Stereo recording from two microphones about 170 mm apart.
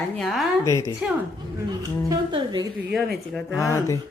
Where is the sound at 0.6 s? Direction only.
20° left (ahead or behind).